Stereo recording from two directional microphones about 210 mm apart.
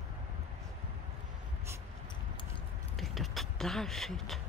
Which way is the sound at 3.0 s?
Centre (ahead or behind).